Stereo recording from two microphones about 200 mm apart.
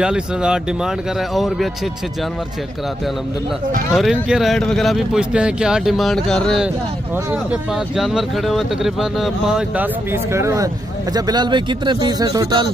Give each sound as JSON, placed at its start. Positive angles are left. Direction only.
{"t": 0.0, "sound": "speech", "side_deg": -5}
{"t": 3.9, "sound": "speech", "side_deg": -5}
{"t": 7.9, "sound": "speech", "side_deg": -5}
{"t": 10.3, "sound": "speech", "side_deg": -15}